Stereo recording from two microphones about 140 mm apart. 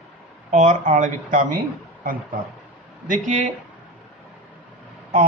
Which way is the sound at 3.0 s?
65° right (ahead or behind).